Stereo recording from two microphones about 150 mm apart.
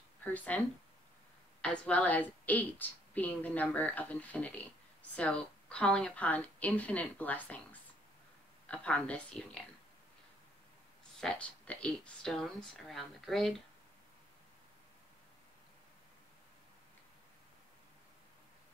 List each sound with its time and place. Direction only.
0.2 s speech: 10° left (ahead or behind)
1.6 s a woman's voice: 5° left (ahead or behind)
11.1 s speech: 5° left (ahead or behind)